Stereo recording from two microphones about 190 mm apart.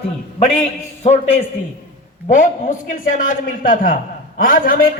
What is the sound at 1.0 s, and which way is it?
A man's voice, 35° left (ahead or behind).